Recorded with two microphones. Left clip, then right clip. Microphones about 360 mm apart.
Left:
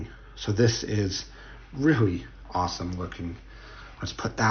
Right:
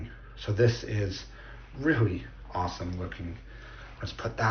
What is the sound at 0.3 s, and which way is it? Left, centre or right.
Speech, centre.